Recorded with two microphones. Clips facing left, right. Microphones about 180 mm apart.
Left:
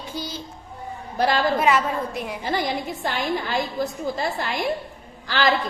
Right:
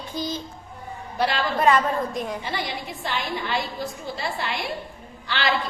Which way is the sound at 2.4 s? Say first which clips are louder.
Left 5 dB; 45° left (ahead or behind).